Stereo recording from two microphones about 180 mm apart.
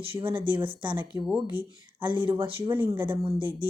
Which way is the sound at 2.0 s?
25° right (ahead or behind).